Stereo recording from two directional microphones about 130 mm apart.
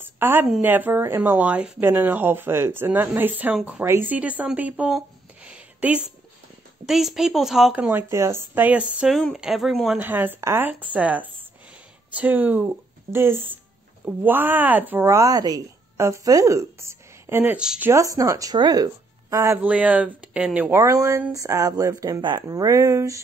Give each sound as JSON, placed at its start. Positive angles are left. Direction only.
{"t": 0.0, "sound": "a sound", "side_deg": -15}
{"t": 0.6, "sound": "a woman's voice", "side_deg": -15}
{"t": 8.1, "sound": "a woman's voice", "side_deg": -20}
{"t": 9.9, "sound": "speech", "side_deg": -15}
{"t": 17.9, "sound": "speech", "side_deg": -25}
{"t": 19.3, "sound": "speech", "side_deg": -20}
{"t": 20.7, "sound": "speech", "side_deg": -20}